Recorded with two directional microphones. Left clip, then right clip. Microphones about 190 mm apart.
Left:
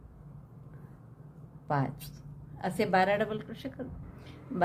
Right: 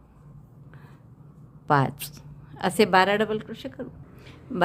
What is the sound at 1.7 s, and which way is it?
A woman's voice, 40° right (ahead or behind).